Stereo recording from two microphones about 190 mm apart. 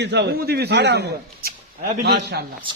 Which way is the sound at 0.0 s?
65° right (ahead or behind).